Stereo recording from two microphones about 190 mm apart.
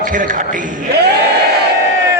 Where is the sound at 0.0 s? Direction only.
45° right (ahead or behind).